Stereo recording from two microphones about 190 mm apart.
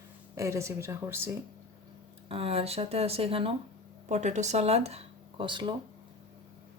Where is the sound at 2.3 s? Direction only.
30° right (ahead or behind).